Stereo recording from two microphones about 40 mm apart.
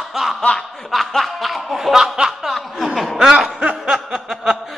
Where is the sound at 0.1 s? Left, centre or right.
Centre.